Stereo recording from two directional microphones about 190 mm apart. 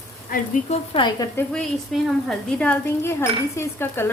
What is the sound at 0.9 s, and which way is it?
Speech, 25° left (ahead or behind).